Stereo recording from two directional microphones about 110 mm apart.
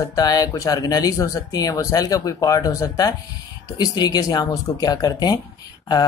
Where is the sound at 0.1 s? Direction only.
35° left (ahead or behind).